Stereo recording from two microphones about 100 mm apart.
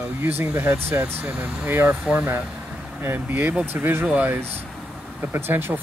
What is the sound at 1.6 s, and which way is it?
Speech, 20° right (ahead or behind).